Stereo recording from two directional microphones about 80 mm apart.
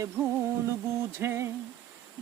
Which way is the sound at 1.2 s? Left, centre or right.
Right.